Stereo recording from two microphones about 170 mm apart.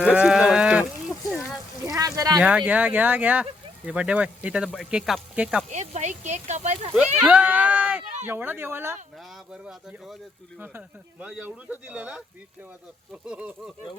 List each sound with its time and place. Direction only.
0.0 s livestock: 5° right (ahead or behind)
1.9 s a sound: 20° right (ahead or behind)
2.4 s speech: 5° right (ahead or behind)
5.7 s speech: 40° right (ahead or behind)
7.2 s speech: 10° right (ahead or behind)
9.5 s speech: 5° right (ahead or behind)
13.2 s speech: 5° right (ahead or behind)